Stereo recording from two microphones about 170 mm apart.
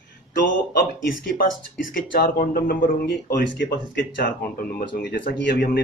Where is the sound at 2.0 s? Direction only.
55° left (ahead or behind).